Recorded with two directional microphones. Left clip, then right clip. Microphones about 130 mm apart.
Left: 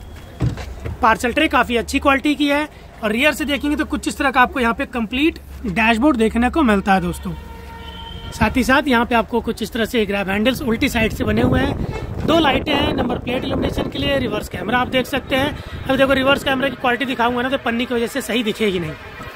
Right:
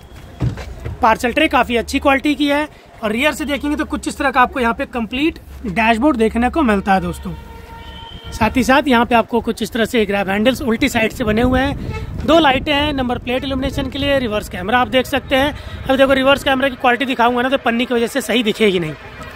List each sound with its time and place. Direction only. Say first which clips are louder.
1.0 s speech: right 2 dB; 15° right (ahead or behind)
8.4 s speech: right 2 dB; 25° right (ahead or behind); by 18.9 s 45° right (ahead or behind)